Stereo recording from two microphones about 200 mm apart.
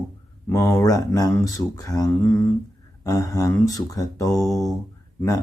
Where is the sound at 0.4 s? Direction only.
15° left (ahead or behind).